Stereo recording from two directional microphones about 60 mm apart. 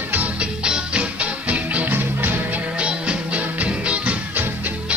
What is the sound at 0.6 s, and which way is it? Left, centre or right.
Music, centre.